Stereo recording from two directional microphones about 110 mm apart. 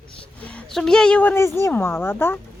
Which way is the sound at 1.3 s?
25° left (ahead or behind).